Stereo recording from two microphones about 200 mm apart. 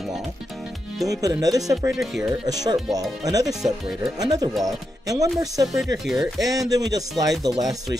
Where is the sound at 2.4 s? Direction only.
20° right (ahead or behind).